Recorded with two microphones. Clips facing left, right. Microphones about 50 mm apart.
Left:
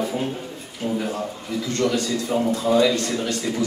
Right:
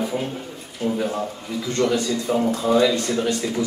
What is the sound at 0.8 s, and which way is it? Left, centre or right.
Speech, centre.